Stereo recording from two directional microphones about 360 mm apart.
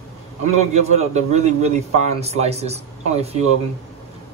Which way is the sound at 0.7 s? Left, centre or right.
Centre.